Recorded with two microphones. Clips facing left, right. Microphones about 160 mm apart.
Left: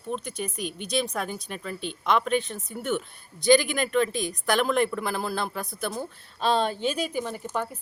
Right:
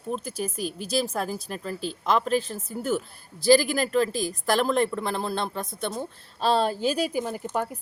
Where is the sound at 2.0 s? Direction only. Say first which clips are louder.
Even; 35° right (ahead or behind).